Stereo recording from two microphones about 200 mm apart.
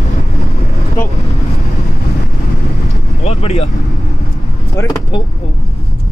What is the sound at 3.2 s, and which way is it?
Vehicle, 35° left (ahead or behind).